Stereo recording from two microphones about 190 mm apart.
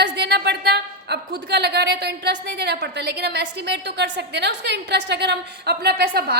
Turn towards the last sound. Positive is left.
turn(degrees=-55)  # may be behind; listen again after turning